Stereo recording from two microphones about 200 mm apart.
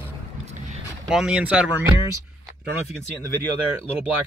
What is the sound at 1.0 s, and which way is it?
Speech, 5° right (ahead or behind).